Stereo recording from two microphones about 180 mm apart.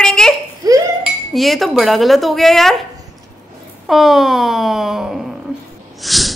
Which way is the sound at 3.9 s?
Centre (ahead or behind).